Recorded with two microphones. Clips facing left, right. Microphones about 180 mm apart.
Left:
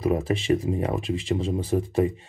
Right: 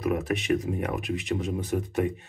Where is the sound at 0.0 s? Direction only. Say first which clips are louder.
Left 3 dB; 30° left (ahead or behind).